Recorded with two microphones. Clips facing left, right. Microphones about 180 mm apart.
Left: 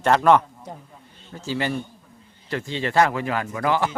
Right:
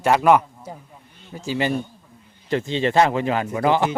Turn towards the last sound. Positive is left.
turn(degrees=-20)  # may be behind; listen again after turning